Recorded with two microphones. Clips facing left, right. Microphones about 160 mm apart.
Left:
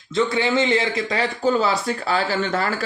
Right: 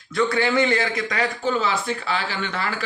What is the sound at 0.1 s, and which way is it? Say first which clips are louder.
A man's voice: left 1 dB; 25° left (ahead or behind).